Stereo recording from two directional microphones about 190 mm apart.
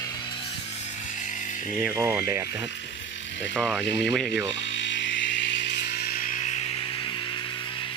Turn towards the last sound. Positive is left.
turn(degrees=30)  # may be behind; listen again after turning